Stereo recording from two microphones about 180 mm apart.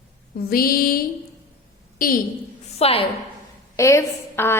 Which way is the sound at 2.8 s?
35° left (ahead or behind).